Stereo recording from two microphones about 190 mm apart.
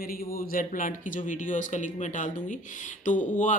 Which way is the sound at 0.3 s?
45° left (ahead or behind).